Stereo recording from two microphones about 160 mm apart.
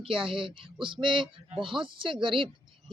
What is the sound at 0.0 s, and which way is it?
Speech, 35° right (ahead or behind).